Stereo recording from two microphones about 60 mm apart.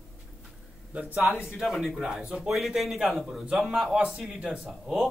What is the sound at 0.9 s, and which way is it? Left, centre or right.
Speech, right.